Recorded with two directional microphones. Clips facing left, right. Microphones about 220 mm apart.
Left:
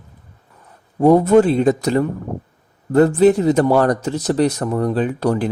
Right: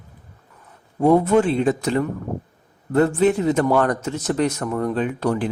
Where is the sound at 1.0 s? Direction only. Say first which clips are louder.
Left 4 dB; 40° left (ahead or behind).